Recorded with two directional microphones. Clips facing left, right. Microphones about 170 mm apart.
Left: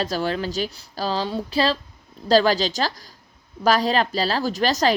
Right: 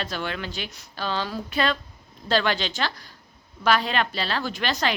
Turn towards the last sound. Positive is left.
turn(degrees=40)  # may be behind; listen again after turning